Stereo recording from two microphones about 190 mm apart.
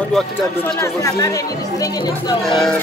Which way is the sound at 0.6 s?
15° left (ahead or behind).